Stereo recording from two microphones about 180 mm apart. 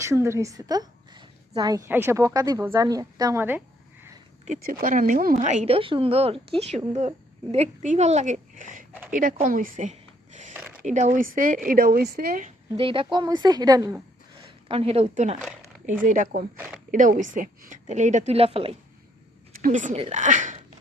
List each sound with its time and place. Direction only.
0.0 s speech: 15° right (ahead or behind)
4.4 s a woman's voice: 50° right (ahead or behind)
5.4 s a woman's voice: 40° right (ahead or behind)
8.9 s a sound: 10° right (ahead or behind)
9.1 s a woman's voice: 45° right (ahead or behind)
12.7 s speech: 30° right (ahead or behind)
14.3 s a woman's voice: 30° right (ahead or behind)
19.6 s speech: 45° right (ahead or behind)